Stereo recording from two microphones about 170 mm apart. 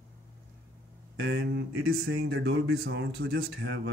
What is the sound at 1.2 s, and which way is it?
Speech, 75° right (ahead or behind).